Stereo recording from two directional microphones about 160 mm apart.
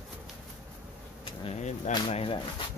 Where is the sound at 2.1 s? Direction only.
35° left (ahead or behind).